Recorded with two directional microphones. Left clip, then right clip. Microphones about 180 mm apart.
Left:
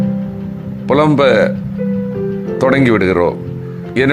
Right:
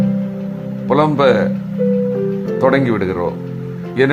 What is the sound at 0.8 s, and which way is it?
Speech, 25° left (ahead or behind).